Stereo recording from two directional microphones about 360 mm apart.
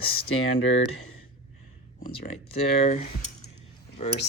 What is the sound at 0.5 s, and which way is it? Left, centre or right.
Speech, left.